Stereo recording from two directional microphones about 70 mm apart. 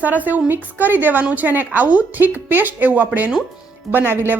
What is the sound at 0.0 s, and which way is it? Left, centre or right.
A woman's voice, right.